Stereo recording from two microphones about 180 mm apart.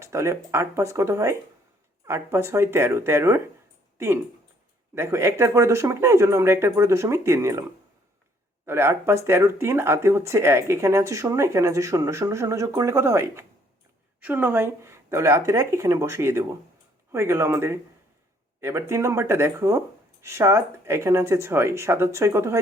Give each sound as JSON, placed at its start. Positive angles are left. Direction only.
{"t": 0.0, "sound": "speech", "side_deg": -15}
{"t": 8.6, "sound": "speech", "side_deg": -15}